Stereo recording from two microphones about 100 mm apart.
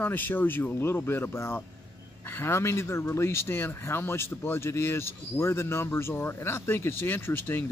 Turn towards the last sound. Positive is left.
turn(degrees=25)  # may be behind; listen again after turning